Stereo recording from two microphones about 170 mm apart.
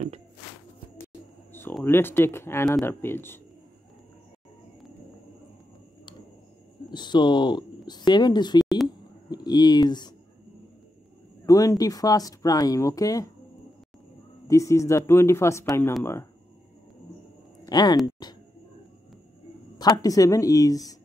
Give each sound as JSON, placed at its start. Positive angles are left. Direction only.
{"t": 1.5, "sound": "a sound", "side_deg": 15}
{"t": 1.9, "sound": "speech", "side_deg": 15}
{"t": 6.9, "sound": "speech", "side_deg": 25}
{"t": 11.4, "sound": "speech", "side_deg": 20}
{"t": 14.5, "sound": "speech", "side_deg": 15}
{"t": 17.6, "sound": "speech", "side_deg": 25}
{"t": 19.8, "sound": "speech", "side_deg": 20}